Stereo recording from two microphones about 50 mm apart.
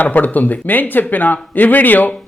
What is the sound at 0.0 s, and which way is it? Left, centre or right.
Speech, left.